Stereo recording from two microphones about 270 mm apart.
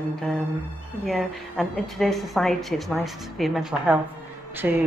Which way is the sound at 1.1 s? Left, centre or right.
Centre.